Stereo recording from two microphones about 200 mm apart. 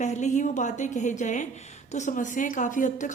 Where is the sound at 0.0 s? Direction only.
35° left (ahead or behind).